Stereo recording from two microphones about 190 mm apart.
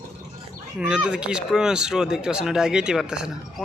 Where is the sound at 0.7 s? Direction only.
5° right (ahead or behind).